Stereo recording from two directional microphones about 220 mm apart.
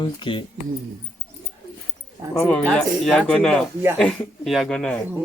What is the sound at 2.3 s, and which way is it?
Speech, 5° left (ahead or behind).